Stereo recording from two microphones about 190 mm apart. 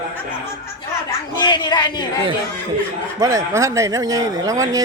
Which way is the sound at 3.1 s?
15° right (ahead or behind).